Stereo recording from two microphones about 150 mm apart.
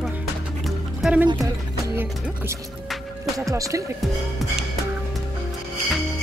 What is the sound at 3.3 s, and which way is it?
Speech, 20° right (ahead or behind).